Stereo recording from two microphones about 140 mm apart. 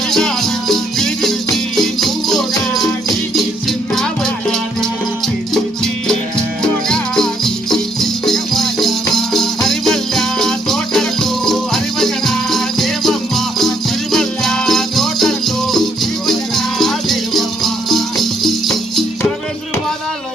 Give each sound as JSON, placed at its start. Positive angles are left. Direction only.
{"t": 0.1, "sound": "music", "side_deg": 5}
{"t": 6.6, "sound": "music", "side_deg": 5}